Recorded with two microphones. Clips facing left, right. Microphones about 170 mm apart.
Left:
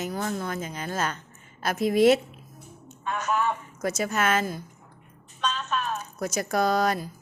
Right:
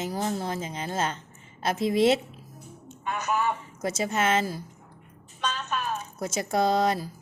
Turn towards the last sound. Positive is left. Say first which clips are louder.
# even
turn(degrees=-25)  # may be behind; listen again after turning